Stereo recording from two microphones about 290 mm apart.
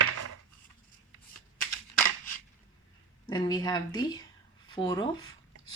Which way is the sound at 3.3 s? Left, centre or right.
Centre.